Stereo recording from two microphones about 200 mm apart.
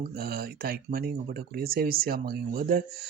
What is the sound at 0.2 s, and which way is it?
Speech, 50° right (ahead or behind).